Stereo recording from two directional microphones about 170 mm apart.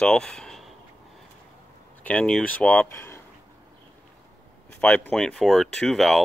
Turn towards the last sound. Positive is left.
turn(degrees=0)  # may be behind; listen again after turning